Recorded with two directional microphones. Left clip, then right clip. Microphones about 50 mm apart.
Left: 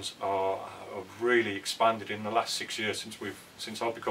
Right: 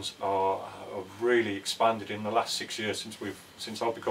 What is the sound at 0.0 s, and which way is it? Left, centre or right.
Speech, centre.